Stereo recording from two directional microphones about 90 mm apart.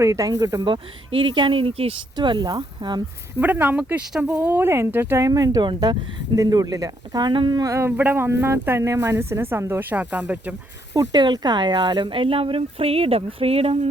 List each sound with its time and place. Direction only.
0.0 s speech: 35° right (ahead or behind)
0.6 s speech: 70° right (ahead or behind); by 2.0 s 90° right
2.1 s speech: 55° right (ahead or behind)
3.4 s speech: 20° right (ahead or behind)
5.1 s speech: 40° right (ahead or behind)
6.3 s speech: 40° right (ahead or behind); by 7.6 s 60° right (ahead or behind)
7.6 s speech: 30° right (ahead or behind)
10.0 s speech: 15° right (ahead or behind)
11.1 s speech: 55° right (ahead or behind); by 13.7 s 90° right